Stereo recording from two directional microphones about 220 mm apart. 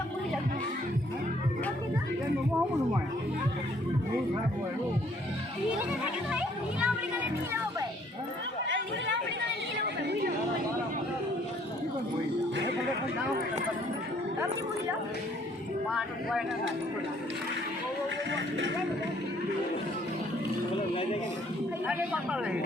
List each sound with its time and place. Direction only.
6.3 s a child's voice: 5° right (ahead or behind)
9.7 s chatter: 50° right (ahead or behind)
18.3 s speech: 55° right (ahead or behind)
20.9 s speech: 25° left (ahead or behind)
21.8 s a child's voice: 5° right (ahead or behind)